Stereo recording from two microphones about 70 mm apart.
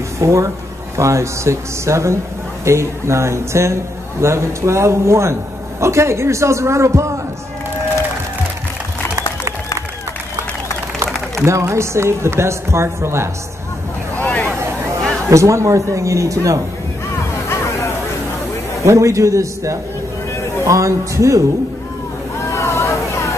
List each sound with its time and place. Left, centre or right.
0.2 s a man's voice: right
11.1 s a sound: centre
11.4 s a man's voice: right
14.2 s vehicle: centre
15.2 s a man's voice: right
17.5 s hubbub: left
18.8 s a man's voice: right
22.5 s a sound: left